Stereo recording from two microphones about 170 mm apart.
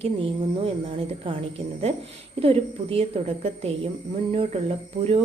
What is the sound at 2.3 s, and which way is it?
A woman's voice, 35° right (ahead or behind).